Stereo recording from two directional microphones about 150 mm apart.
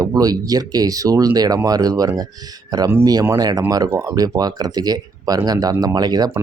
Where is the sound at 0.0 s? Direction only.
25° right (ahead or behind).